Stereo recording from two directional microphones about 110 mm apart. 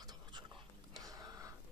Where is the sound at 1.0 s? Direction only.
35° right (ahead or behind).